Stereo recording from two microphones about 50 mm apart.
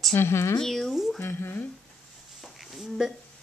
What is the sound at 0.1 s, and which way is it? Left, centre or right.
Speech, left.